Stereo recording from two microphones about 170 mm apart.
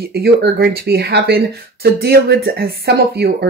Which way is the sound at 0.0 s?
65° right (ahead or behind).